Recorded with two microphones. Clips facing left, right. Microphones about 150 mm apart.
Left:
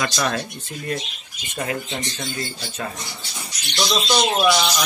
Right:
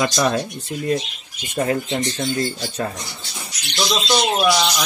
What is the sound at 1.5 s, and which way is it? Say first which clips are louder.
Speech: right 6 dB; 30° right (ahead or behind).